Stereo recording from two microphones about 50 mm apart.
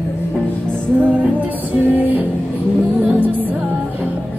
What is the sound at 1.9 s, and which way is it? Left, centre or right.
Music, right.